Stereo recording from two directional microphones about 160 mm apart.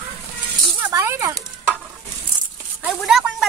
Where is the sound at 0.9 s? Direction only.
15° right (ahead or behind).